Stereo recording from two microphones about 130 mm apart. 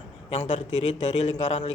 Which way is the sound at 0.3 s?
60° left (ahead or behind).